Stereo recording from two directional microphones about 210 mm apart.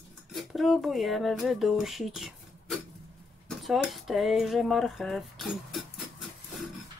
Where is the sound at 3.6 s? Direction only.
Centre (ahead or behind).